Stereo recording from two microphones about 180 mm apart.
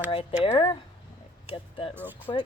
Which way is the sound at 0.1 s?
30° left (ahead or behind).